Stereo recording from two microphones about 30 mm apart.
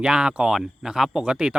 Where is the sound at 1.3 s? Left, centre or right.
Right.